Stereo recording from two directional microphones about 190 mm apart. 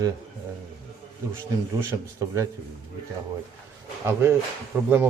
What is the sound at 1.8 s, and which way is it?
Speech, 15° right (ahead or behind).